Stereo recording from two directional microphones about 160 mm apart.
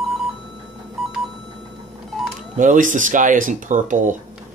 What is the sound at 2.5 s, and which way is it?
Speech, 55° right (ahead or behind).